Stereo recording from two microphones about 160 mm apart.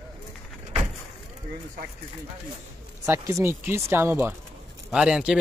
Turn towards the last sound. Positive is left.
turn(degrees=-5)  # may be behind; listen again after turning